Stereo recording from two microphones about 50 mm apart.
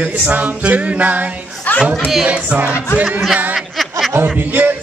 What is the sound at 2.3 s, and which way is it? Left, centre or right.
Music, right.